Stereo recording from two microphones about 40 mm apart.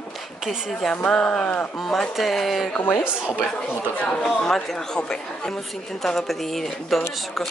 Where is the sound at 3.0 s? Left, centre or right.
Right.